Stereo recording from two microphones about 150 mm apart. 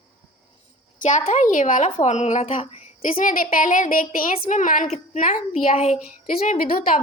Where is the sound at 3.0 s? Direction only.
65° left (ahead or behind).